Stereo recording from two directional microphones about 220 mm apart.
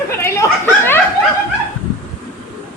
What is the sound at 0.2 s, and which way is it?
Chuckle, 10° left (ahead or behind).